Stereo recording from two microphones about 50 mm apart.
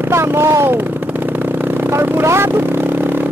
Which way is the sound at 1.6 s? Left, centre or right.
Right.